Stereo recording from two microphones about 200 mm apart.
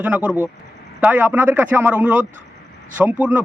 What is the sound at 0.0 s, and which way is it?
A man's voice, 5° right (ahead or behind).